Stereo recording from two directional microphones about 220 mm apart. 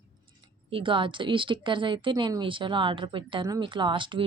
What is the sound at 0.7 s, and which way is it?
A woman's voice, 25° right (ahead or behind).